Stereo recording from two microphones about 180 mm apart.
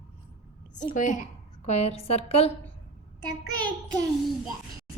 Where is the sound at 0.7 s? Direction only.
45° left (ahead or behind).